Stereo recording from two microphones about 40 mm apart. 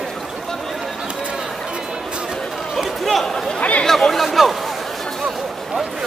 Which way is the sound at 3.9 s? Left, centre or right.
Centre.